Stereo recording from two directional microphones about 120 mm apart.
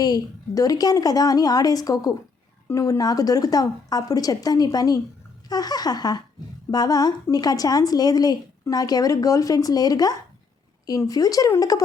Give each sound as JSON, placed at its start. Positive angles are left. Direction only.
{"t": 0.0, "sound": "a woman's voice", "side_deg": 30}